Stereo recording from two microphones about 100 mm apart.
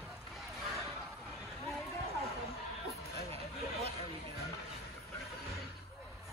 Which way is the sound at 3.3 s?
90° right.